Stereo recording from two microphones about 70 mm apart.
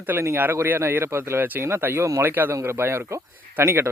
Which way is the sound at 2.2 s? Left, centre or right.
Right.